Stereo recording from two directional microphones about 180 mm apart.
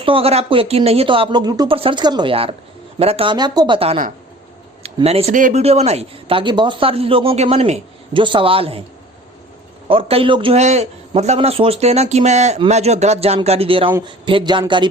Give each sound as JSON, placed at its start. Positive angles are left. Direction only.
{"t": 0.0, "sound": "speech", "side_deg": -30}
{"t": 9.9, "sound": "speech", "side_deg": -30}